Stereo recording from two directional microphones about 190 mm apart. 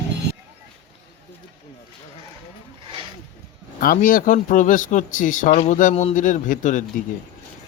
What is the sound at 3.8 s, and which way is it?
Speech, 45° left (ahead or behind).